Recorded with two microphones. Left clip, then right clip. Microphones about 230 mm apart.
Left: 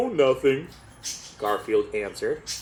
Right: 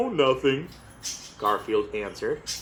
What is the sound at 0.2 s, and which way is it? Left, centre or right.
Speech, left.